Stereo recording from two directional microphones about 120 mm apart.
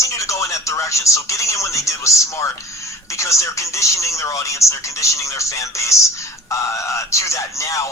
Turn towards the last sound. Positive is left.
turn(degrees=25)  # may be behind; listen again after turning